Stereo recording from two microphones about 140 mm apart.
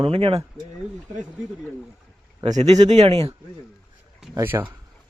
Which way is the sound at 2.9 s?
50° right (ahead or behind).